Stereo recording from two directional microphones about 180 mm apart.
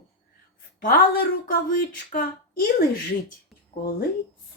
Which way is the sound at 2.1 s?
55° left (ahead or behind).